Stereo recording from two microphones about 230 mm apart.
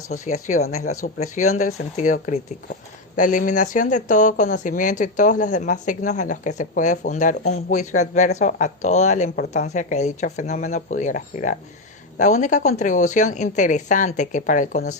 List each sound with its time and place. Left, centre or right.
0.1 s speech: left